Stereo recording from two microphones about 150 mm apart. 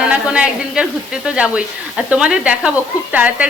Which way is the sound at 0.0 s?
5° right (ahead or behind).